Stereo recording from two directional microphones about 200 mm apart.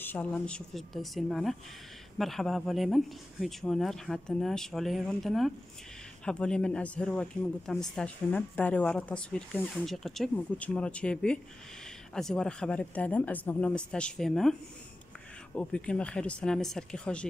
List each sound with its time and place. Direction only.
0.0 s speech: 10° left (ahead or behind)